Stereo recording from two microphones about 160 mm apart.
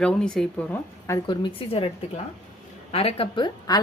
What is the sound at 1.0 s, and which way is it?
Speech, 20° left (ahead or behind).